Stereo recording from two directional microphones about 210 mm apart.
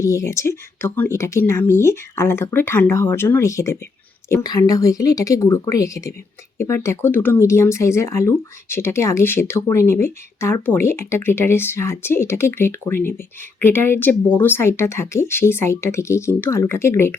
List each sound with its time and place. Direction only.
0.0 s speech: 15° left (ahead or behind)